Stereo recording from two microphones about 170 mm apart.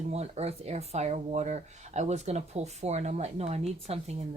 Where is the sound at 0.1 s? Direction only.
40° right (ahead or behind).